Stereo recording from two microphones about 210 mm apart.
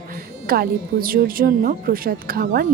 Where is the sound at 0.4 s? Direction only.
45° right (ahead or behind).